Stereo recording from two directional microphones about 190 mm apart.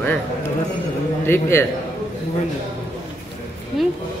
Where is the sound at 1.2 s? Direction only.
15° left (ahead or behind).